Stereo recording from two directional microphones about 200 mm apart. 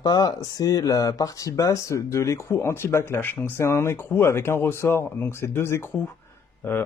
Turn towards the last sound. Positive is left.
turn(degrees=10)  # may be behind; listen again after turning